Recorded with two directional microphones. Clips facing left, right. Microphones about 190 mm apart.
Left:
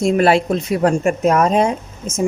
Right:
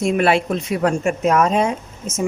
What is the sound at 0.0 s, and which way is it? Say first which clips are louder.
A woman's voice: left 3 dB; 35° left (ahead or behind).